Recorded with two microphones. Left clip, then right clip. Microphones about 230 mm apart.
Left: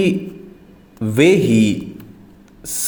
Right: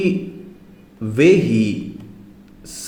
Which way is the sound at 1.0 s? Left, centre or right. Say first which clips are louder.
Even; left.